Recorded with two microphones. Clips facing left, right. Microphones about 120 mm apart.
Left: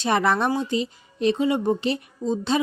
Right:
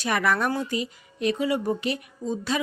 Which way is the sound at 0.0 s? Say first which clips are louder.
Left 3 dB; 25° left (ahead or behind).